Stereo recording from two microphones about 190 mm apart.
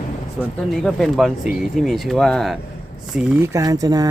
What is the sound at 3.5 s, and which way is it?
Speech, 15° right (ahead or behind).